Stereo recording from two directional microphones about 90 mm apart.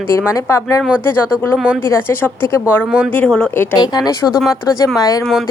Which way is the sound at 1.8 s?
30° left (ahead or behind).